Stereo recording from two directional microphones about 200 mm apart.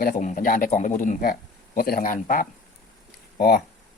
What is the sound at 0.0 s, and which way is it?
Speech, 45° left (ahead or behind).